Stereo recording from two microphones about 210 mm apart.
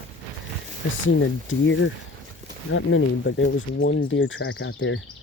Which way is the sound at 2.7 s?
65° left (ahead or behind).